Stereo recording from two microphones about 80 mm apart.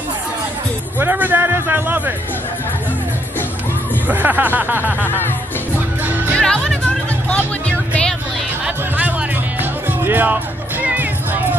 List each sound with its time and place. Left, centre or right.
0.9 s music: right
4.1 s speech: right
5.0 s speech: left
6.0 s music: right
6.3 s music: centre
8.6 s music: right